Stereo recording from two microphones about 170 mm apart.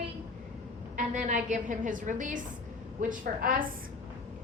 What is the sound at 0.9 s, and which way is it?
A woman's voice, 50° right (ahead or behind).